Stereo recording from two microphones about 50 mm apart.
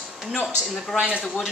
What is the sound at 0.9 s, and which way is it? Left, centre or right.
Speech, right.